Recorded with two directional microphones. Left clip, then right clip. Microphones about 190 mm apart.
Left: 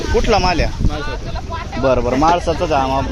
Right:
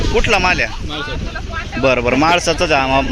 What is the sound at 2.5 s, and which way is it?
Speech, 35° right (ahead or behind).